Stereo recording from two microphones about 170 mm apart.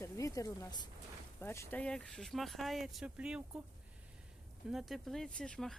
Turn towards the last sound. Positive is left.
turn(degrees=5)  # may be behind; listen again after turning